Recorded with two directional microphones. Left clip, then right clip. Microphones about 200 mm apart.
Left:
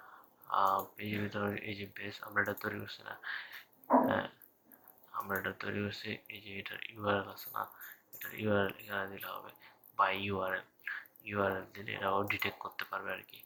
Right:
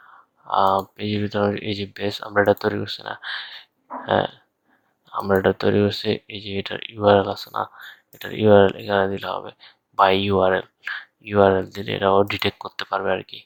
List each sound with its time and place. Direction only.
0.4 s speech: 60° right (ahead or behind)